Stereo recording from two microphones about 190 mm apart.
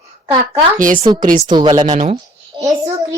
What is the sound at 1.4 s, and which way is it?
Speech, 25° right (ahead or behind).